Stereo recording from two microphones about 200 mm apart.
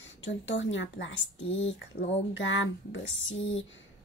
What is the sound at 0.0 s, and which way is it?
A woman's voice, 65° left (ahead or behind).